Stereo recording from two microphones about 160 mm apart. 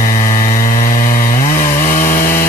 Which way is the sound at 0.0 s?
55° left (ahead or behind).